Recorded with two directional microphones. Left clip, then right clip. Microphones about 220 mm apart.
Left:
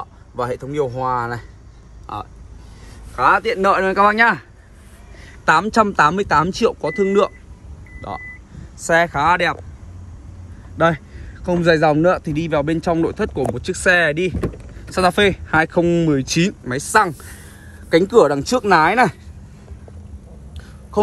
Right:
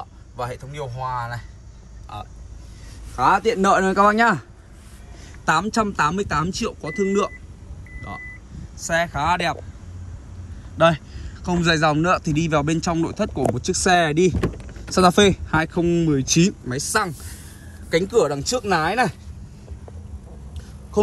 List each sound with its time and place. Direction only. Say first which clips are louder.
0.4 s speech: left 9 dB; centre (ahead or behind)
3.2 s speech: left 2 dB; 20° right (ahead or behind)
8.8 s speech: left 6 dB; 5° right (ahead or behind)
10.8 s a man's voice: even; 5° right (ahead or behind)
12.2 s speech: left 2 dB; 15° right (ahead or behind)
15.6 s speech: left 5 dB; 10° right (ahead or behind)